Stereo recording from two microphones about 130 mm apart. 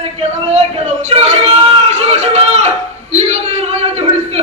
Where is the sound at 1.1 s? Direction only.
55° right (ahead or behind).